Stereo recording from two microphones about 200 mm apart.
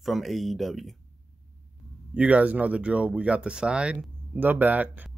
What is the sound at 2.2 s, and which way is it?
Speech, 5° right (ahead or behind).